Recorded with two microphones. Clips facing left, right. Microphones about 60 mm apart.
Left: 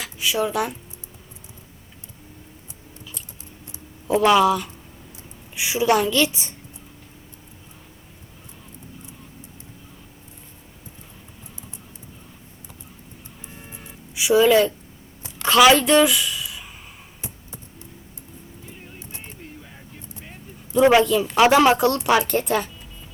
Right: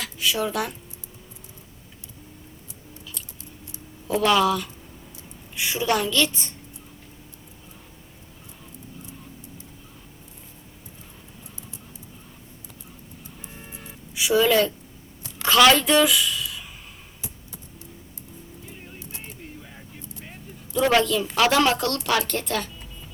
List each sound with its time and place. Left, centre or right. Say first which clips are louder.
0.0 s speech: left 2 dB; centre
4.0 s a woman's voice: left 4 dB; centre
13.8 s a sound: left 3 dB; centre
15.4 s a woman's voice: left 2 dB; centre
17.2 s a sound: left 3 dB; left
20.7 s a woman's voice: left 5 dB; centre